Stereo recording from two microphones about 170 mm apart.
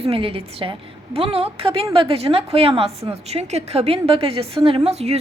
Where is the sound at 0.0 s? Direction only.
35° right (ahead or behind).